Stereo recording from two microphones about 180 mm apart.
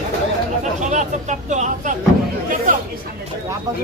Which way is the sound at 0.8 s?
40° right (ahead or behind).